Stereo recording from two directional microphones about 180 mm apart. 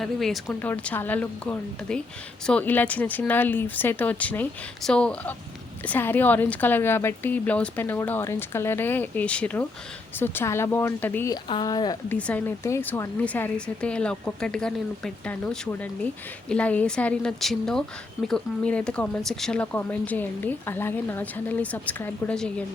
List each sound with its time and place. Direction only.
0.0 s a woman's voice: centre (ahead or behind)
11.4 s speech: 25° left (ahead or behind)
12.0 s a woman's voice: 10° left (ahead or behind)